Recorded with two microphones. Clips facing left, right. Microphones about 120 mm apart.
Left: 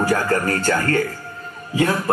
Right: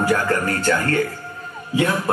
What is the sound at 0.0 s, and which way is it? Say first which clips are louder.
A man's voice: even; 40° left (ahead or behind).